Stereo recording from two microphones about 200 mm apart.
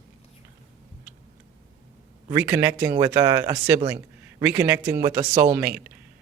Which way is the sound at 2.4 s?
10° right (ahead or behind).